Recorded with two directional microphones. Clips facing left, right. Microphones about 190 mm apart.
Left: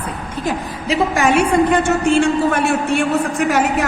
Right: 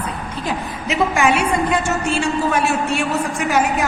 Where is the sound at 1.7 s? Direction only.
55° left (ahead or behind).